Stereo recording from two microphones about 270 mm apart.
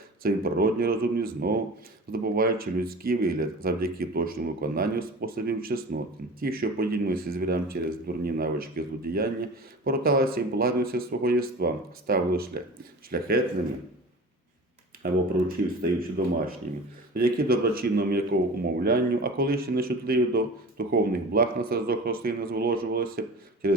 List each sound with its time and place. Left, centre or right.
0.2 s speech: right
15.0 s speech: right
17.2 s speech: right